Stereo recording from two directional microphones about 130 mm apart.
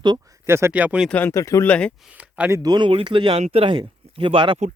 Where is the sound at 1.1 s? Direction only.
15° left (ahead or behind).